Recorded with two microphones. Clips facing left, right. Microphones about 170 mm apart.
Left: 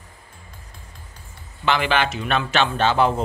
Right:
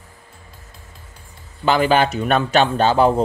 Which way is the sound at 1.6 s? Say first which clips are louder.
Right 5 dB; 40° right (ahead or behind).